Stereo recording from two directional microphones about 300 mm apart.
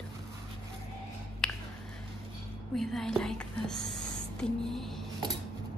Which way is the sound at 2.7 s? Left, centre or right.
Centre.